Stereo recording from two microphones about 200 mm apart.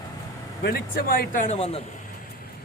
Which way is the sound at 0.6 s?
50° left (ahead or behind).